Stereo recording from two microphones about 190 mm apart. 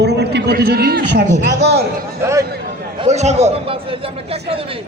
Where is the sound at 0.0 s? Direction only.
60° right (ahead or behind).